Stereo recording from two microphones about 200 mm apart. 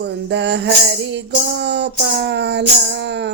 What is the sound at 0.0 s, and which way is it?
Child singing, 60° right (ahead or behind).